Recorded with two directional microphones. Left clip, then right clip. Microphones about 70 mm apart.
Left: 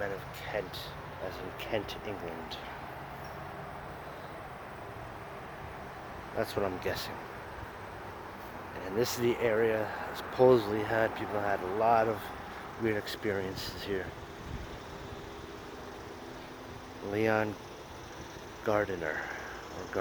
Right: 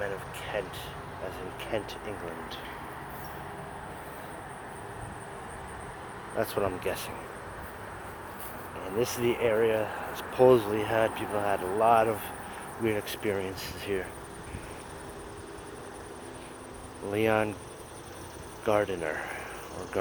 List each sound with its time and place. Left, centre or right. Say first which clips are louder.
1.7 s speech: right 1 dB; left
6.3 s speech: right 3 dB; centre
6.6 s speech: right 3 dB; centre
8.8 s speech: right 2 dB; left
10.7 s speech: right 3 dB; centre
13.3 s speech: right 2 dB; centre
17.1 s speech: right 3 dB; centre
18.6 s speech: right 3 dB; centre